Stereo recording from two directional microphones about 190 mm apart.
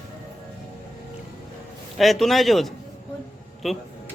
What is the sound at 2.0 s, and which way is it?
A man's voice, centre (ahead or behind).